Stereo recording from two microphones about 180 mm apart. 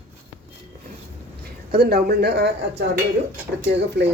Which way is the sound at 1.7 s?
60° right (ahead or behind).